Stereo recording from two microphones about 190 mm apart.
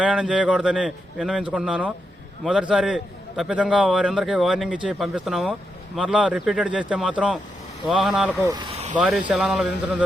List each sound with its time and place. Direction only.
0.0 s a man's voice: 5° right (ahead or behind)
8.4 s speech: 20° right (ahead or behind)
9.0 s a man's voice: 5° right (ahead or behind)